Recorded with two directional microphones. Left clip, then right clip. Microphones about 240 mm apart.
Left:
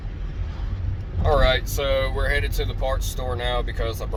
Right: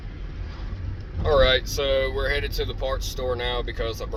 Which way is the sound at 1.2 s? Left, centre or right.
Centre.